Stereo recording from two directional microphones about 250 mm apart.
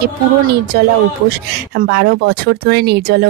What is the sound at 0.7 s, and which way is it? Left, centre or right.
Speech, right.